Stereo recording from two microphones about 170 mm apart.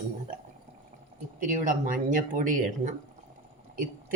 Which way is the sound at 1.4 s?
50° right (ahead or behind).